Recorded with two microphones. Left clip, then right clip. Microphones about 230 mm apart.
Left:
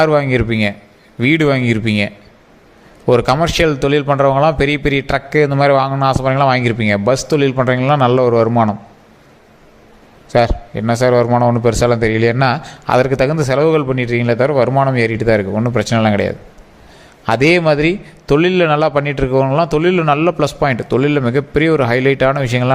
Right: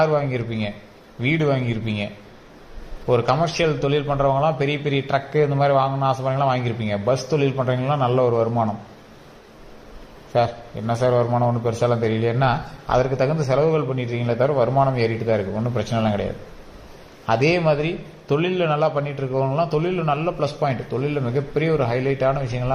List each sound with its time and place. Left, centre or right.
0.0 s a man's voice: left
3.1 s a man's voice: left
10.3 s a man's voice: left